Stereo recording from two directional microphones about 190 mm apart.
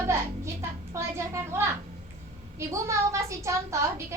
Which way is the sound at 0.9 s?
15° right (ahead or behind).